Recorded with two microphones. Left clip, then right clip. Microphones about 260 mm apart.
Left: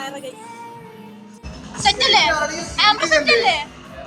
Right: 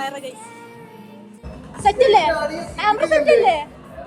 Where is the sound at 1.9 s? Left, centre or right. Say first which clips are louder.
Right 1 dB; centre.